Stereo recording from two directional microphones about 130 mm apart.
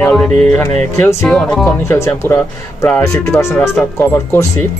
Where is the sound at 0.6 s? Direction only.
20° left (ahead or behind).